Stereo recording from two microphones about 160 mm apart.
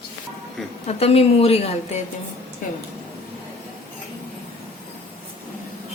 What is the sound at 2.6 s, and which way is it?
Speech, 55° left (ahead or behind).